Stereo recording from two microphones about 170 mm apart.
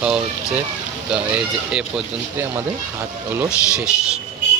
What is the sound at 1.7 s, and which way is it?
Speech, 5° right (ahead or behind).